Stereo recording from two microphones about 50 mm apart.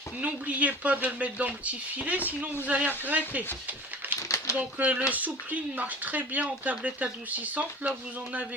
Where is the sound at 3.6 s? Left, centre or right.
Right.